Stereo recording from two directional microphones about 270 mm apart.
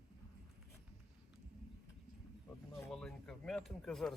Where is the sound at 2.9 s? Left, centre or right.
Centre.